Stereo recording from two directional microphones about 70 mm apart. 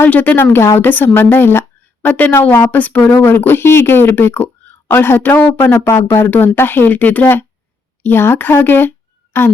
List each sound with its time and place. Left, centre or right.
0.0 s speech: left